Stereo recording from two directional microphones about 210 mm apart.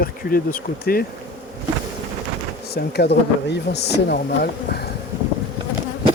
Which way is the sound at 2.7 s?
50° left (ahead or behind).